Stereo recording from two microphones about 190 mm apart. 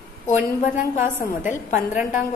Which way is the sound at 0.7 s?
40° left (ahead or behind).